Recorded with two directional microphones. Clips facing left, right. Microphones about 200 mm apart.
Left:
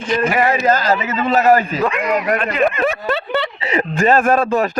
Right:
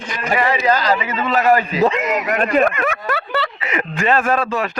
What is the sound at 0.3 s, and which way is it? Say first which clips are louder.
Speech: right 2 dB; 45° left (ahead or behind).